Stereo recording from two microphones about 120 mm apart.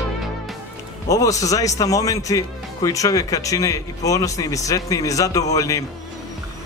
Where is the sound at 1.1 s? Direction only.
30° left (ahead or behind).